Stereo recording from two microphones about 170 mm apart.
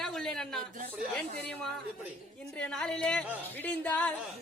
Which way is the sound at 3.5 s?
10° left (ahead or behind).